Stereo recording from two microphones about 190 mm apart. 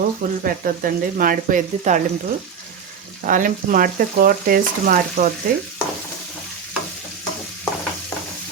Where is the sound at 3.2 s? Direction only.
45° right (ahead or behind).